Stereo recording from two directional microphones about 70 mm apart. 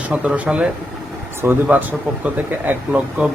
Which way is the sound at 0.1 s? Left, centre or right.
Centre.